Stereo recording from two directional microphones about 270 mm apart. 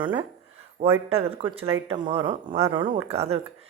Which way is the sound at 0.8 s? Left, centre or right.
Right.